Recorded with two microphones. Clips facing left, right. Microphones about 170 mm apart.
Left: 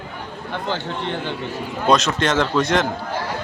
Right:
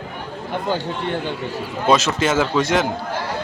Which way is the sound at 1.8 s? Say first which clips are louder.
Right 1 dB; 5° right (ahead or behind).